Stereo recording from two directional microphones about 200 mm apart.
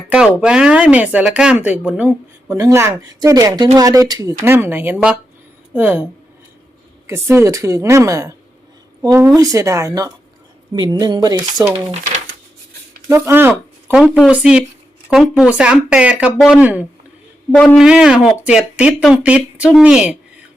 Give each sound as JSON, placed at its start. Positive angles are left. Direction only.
{"t": 0.1, "sound": "speech", "side_deg": -5}
{"t": 7.1, "sound": "speech", "side_deg": -15}
{"t": 13.1, "sound": "speech", "side_deg": -15}